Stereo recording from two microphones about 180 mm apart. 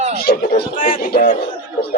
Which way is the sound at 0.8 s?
50° left (ahead or behind).